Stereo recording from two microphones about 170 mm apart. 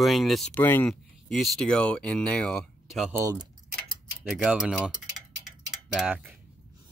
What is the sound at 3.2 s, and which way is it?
Speech, 20° right (ahead or behind).